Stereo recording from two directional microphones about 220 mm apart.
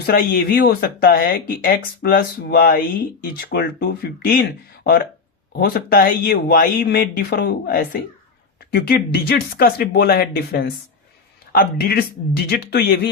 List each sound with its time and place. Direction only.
0.0 s speech: 45° left (ahead or behind)